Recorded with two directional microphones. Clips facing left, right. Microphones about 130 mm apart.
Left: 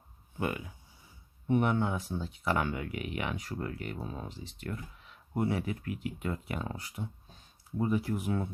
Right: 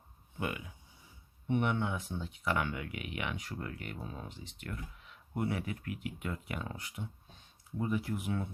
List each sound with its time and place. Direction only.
0.3 s speech: 40° left (ahead or behind)